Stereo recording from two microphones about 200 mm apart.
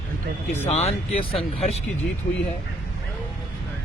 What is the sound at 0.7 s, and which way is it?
Speech, 30° left (ahead or behind).